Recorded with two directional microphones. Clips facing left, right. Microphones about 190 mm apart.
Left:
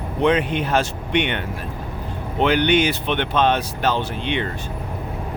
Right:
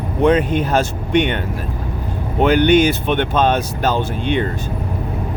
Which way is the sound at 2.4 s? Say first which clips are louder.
Right 5 dB; 45° right (ahead or behind).